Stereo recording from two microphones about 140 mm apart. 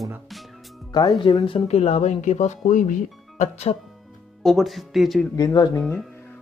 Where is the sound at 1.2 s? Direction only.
35° left (ahead or behind).